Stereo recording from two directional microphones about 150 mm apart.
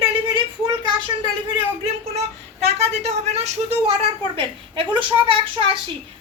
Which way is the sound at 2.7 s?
45° right (ahead or behind).